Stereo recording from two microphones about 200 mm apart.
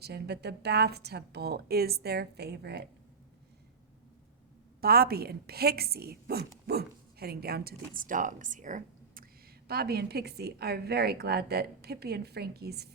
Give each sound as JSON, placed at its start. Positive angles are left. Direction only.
{"t": 0.0, "sound": "speech", "side_deg": -55}
{"t": 4.8, "sound": "speech", "side_deg": -50}
{"t": 9.6, "sound": "speech", "side_deg": -50}